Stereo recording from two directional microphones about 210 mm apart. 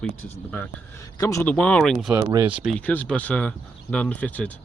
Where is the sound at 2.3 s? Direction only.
25° right (ahead or behind).